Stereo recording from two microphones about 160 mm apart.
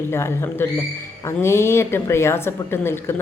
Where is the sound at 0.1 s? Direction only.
15° left (ahead or behind).